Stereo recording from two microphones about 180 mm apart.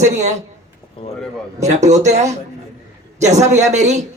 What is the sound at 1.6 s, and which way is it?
Speech, 40° right (ahead or behind).